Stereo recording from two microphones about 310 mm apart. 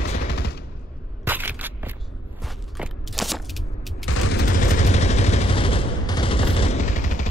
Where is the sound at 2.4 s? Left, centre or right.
Centre.